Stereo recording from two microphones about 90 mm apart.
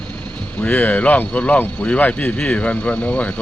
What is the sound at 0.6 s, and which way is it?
Speech, 20° left (ahead or behind).